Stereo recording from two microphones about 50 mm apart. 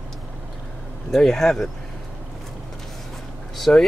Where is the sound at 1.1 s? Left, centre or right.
Centre.